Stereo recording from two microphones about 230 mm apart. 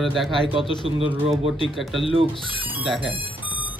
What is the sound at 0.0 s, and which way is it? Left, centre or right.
Speech, centre.